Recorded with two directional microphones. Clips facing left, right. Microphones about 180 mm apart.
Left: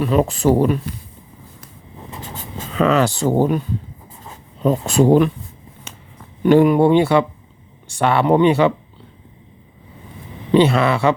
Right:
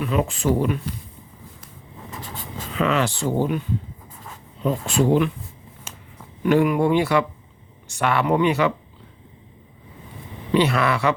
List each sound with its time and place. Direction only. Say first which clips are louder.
0.0 s speech: left 6 dB; 35° left (ahead or behind)
2.3 s speech: left 4 dB; 40° left (ahead or behind)
4.6 s speech: left 6 dB; 40° left (ahead or behind)
6.4 s speech: left 6 dB; 30° left (ahead or behind)
10.5 s speech: left 5 dB; 25° left (ahead or behind)